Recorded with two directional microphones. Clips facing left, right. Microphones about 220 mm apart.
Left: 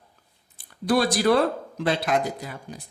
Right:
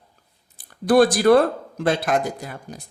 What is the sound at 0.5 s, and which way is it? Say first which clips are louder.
Speech: right 6 dB; 45° right (ahead or behind).